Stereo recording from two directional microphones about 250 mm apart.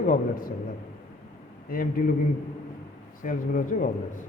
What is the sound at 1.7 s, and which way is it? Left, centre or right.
Speech, left.